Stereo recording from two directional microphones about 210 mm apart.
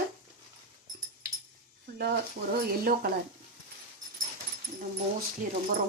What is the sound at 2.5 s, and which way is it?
Speech, 45° right (ahead or behind).